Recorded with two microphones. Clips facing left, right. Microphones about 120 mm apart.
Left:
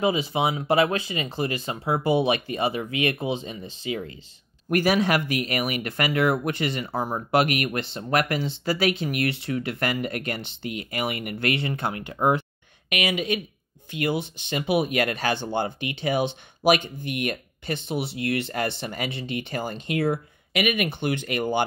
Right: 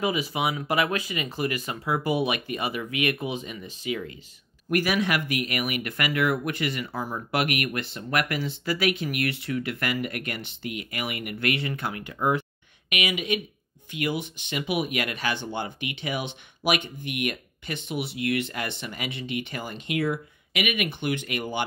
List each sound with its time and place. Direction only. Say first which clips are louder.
0.0 s speech: left 3 dB; 25° left (ahead or behind)